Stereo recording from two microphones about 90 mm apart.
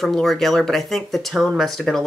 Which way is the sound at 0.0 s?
5° left (ahead or behind).